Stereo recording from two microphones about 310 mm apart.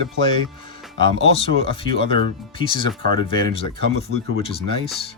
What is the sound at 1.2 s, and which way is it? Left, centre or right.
Speech, centre.